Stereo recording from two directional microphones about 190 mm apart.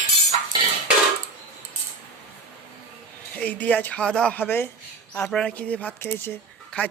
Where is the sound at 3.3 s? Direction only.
5° left (ahead or behind).